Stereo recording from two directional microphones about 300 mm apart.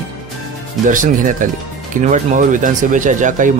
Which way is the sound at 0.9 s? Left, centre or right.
Right.